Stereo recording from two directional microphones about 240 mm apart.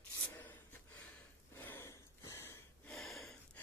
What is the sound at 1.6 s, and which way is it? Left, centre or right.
Gasp, centre.